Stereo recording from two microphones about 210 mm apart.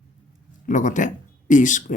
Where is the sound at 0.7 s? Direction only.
35° left (ahead or behind).